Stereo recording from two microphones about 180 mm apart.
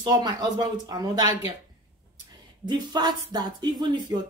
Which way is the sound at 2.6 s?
25° right (ahead or behind).